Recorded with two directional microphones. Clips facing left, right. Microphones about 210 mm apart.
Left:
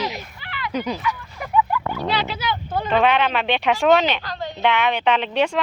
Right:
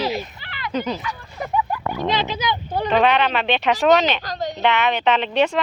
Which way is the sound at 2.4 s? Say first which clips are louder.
Right 1 dB; 15° right (ahead or behind).